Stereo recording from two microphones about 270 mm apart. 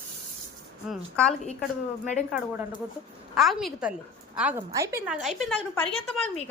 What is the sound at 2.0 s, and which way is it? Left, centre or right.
Speech, left.